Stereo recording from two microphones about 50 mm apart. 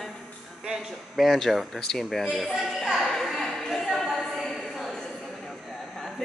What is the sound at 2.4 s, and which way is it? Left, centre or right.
Music, centre.